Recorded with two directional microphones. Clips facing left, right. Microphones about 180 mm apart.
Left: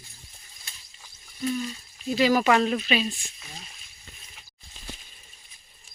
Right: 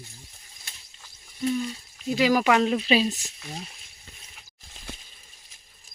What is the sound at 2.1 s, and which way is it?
Speech, 10° right (ahead or behind).